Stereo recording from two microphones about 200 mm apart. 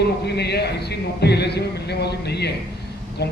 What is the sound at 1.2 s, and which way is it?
A man's voice, 55° left (ahead or behind).